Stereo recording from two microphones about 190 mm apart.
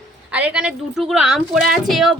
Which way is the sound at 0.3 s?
5° right (ahead or behind).